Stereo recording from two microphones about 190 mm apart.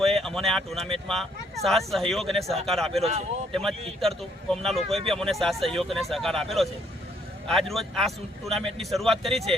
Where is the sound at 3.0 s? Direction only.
35° right (ahead or behind).